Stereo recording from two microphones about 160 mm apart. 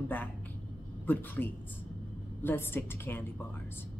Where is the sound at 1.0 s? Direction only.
10° left (ahead or behind).